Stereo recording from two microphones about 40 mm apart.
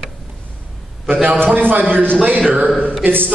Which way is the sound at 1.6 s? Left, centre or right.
Right.